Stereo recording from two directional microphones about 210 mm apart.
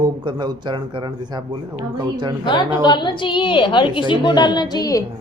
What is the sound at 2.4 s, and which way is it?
A woman's voice, 20° left (ahead or behind).